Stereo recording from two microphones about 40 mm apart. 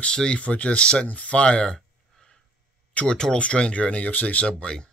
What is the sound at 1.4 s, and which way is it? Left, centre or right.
Speech, left.